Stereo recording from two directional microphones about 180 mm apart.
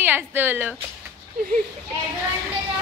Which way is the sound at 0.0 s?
10° right (ahead or behind).